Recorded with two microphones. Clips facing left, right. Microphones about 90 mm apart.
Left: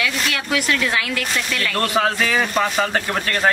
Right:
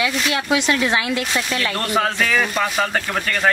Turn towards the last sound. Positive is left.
turn(degrees=0)  # may be behind; listen again after turning